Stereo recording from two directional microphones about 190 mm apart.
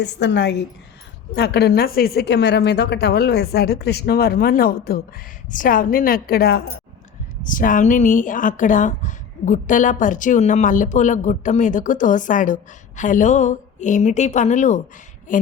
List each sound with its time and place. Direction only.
0.0 s a woman's voice: 65° left (ahead or behind)
7.4 s speech: 45° left (ahead or behind)